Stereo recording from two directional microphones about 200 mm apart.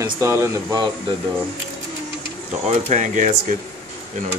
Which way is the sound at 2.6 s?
35° right (ahead or behind).